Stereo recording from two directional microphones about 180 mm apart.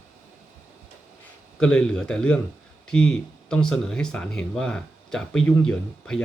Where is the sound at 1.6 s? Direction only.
5° left (ahead or behind).